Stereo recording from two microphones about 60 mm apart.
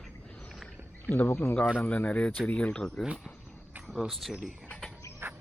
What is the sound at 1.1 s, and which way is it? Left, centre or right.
Speech, left.